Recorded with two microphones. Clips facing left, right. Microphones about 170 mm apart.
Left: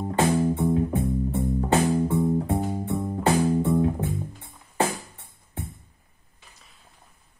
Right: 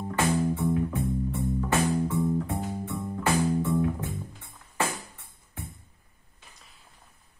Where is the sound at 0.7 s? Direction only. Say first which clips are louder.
Left 4 dB; 35° left (ahead or behind).